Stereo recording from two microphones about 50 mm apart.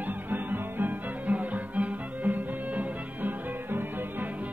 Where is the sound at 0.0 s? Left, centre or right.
Right.